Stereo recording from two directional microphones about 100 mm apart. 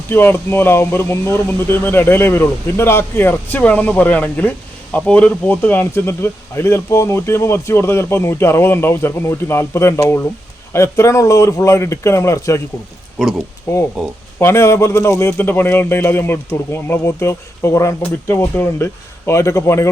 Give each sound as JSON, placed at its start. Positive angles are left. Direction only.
{"t": 0.1, "sound": "speech", "side_deg": 20}
{"t": 13.7, "sound": "speech", "side_deg": 30}